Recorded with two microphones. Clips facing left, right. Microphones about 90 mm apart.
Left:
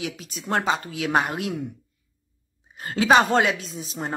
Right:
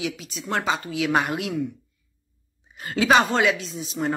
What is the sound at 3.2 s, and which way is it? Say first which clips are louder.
Speech: left 1 dB; 50° left (ahead or behind).